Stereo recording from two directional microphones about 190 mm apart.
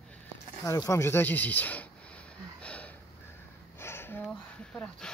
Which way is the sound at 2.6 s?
5° left (ahead or behind).